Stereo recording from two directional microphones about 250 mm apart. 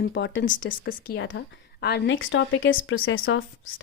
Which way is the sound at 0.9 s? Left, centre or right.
Left.